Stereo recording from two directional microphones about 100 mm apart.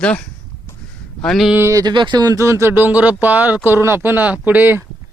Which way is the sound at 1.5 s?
25° right (ahead or behind).